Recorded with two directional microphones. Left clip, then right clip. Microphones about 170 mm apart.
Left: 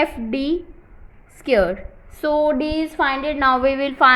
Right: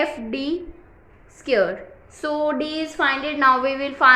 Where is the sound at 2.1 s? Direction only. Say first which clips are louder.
Left 4 dB; 30° left (ahead or behind).